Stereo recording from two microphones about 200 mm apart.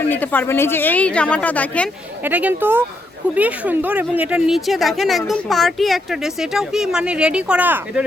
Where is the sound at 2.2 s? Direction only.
10° right (ahead or behind).